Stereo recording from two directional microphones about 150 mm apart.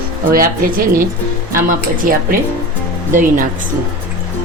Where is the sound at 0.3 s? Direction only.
75° right (ahead or behind).